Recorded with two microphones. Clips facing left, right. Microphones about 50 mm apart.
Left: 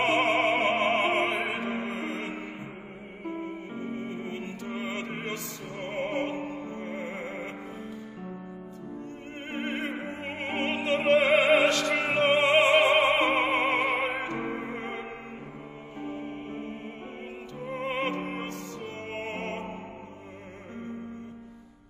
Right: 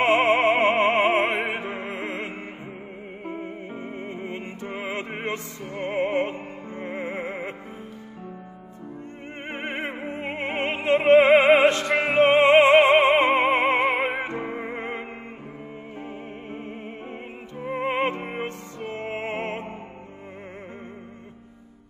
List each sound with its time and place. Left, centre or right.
0.0 s opera: right
3.7 s music: right
9.5 s music: right
13.1 s opera: right
14.5 s music: right